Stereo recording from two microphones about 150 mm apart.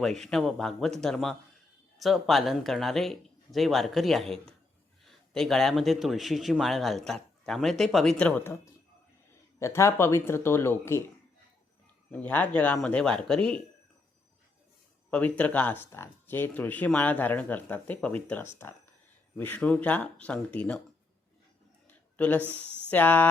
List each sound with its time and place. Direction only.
0.0 s speech: centre (ahead or behind)
12.1 s speech: 10° left (ahead or behind)
15.1 s speech: 10° left (ahead or behind)
21.8 s a sound: 10° left (ahead or behind)
22.4 s speech: 15° right (ahead or behind)
22.9 s speech: 10° left (ahead or behind)